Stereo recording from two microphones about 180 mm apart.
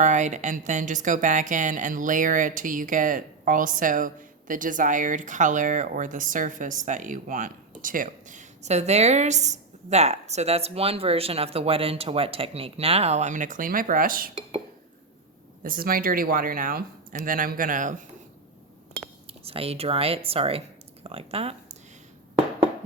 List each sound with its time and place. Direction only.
0.0 s speech: 40° right (ahead or behind)
15.6 s speech: 55° right (ahead or behind)
19.3 s speech: 30° right (ahead or behind)